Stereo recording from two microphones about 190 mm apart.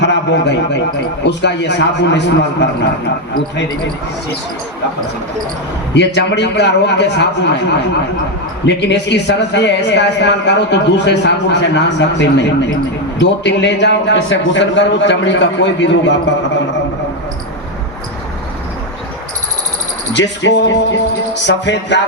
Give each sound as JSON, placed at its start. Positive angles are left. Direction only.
{"t": 0.0, "sound": "a man's voice", "side_deg": 65}
{"t": 5.9, "sound": "speech", "side_deg": 65}
{"t": 8.6, "sound": "a man's voice", "side_deg": 65}
{"t": 20.1, "sound": "a man's voice", "side_deg": 70}